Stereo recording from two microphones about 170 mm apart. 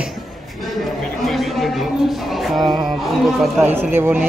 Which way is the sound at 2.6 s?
25° right (ahead or behind).